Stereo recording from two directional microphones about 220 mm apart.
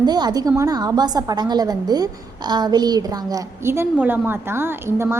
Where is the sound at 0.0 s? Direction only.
20° right (ahead or behind).